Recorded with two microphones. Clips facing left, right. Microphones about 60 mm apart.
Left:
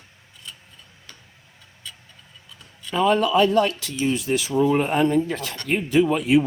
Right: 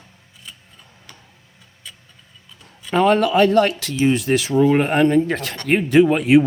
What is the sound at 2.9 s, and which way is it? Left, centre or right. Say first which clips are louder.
Speech: right 3 dB; right.